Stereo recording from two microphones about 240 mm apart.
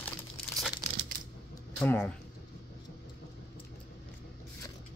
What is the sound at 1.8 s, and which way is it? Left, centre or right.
Speech, centre.